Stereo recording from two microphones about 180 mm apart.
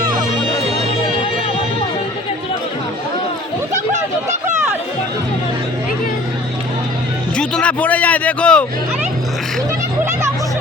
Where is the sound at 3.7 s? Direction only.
40° right (ahead or behind).